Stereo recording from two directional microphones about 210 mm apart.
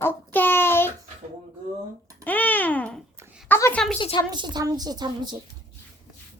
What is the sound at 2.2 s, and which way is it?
A child's voice, 10° left (ahead or behind).